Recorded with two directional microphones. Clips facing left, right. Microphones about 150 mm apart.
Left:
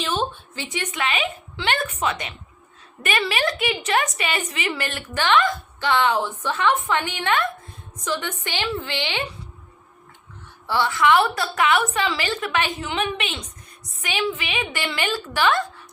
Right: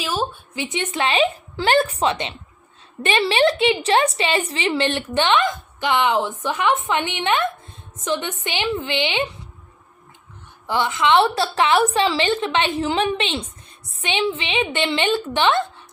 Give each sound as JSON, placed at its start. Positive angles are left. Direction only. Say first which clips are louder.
{"t": 0.0, "sound": "a sound", "louder": "right 1 dB", "side_deg": -5}
{"t": 0.5, "sound": "a woman's voice", "louder": "right 5 dB", "side_deg": -20}
{"t": 10.7, "sound": "a woman's voice", "louder": "right 1 dB", "side_deg": -20}